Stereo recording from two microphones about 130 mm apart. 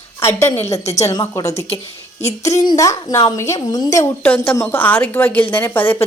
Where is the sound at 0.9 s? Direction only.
25° left (ahead or behind).